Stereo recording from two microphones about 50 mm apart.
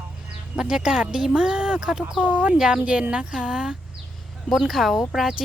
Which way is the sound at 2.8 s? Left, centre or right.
Right.